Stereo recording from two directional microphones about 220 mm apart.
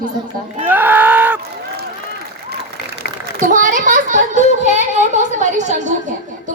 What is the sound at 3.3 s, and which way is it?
A child's voice, 35° right (ahead or behind).